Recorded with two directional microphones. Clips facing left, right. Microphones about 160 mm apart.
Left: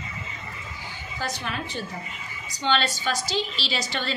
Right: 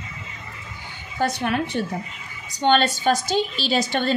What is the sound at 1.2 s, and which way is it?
A woman's voice, 60° right (ahead or behind).